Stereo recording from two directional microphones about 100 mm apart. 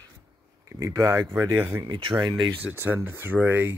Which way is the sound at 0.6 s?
35° right (ahead or behind).